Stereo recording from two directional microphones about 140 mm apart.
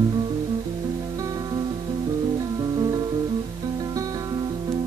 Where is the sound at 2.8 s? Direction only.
30° right (ahead or behind).